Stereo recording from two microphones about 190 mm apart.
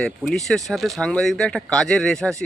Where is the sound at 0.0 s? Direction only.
Centre (ahead or behind).